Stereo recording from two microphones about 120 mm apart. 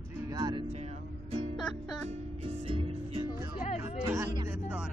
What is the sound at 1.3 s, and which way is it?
Music, 60° right (ahead or behind).